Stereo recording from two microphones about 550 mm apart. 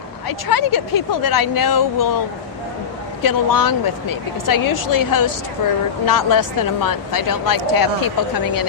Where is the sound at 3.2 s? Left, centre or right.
Left.